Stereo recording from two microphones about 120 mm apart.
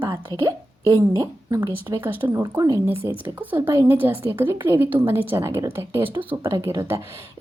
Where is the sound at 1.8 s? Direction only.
20° right (ahead or behind).